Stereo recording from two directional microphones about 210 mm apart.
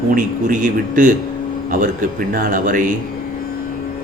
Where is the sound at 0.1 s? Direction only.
40° right (ahead or behind).